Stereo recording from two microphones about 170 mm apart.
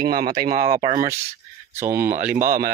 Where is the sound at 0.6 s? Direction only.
40° right (ahead or behind).